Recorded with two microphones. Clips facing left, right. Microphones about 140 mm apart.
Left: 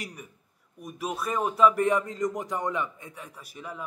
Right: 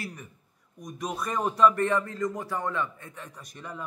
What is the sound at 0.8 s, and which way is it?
A man's voice, 5° left (ahead or behind).